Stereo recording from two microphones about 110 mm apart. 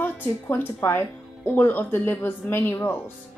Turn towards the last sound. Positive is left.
turn(degrees=20)  # may be behind; listen again after turning